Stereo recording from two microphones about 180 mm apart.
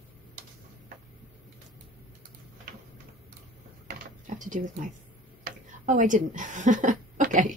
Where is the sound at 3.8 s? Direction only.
45° right (ahead or behind).